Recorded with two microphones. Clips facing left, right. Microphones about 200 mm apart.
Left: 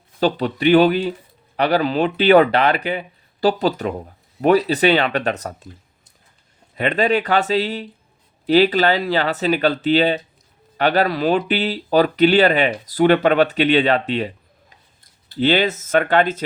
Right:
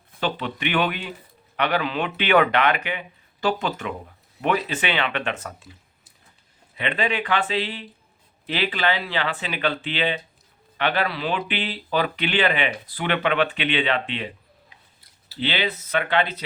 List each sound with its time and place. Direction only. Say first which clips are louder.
0.2 s speech: left 8 dB; 40° left (ahead or behind)
6.7 s speech: left 7 dB; 40° left (ahead or behind)
15.4 s speech: left 9 dB; 45° left (ahead or behind)